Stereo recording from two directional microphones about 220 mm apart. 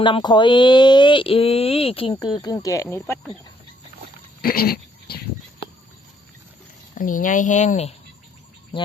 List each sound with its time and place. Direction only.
0.0 s speech: 20° left (ahead or behind)
4.4 s dog: 45° left (ahead or behind)
6.9 s speech: 35° left (ahead or behind)